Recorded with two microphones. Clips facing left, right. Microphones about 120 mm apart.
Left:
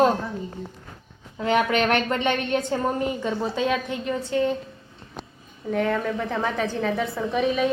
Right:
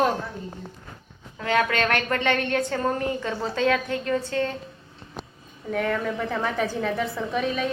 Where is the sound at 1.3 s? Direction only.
20° left (ahead or behind).